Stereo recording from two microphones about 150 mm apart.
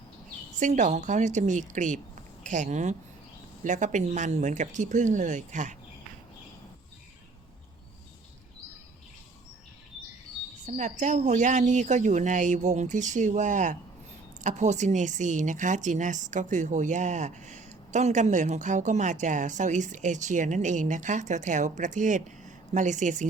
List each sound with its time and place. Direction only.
0.6 s speech: 55° right (ahead or behind)
10.7 s speech: 55° right (ahead or behind)